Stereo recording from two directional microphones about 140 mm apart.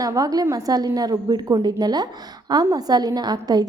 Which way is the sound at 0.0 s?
25° right (ahead or behind).